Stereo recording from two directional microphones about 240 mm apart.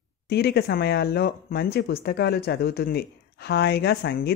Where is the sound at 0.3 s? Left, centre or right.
Left.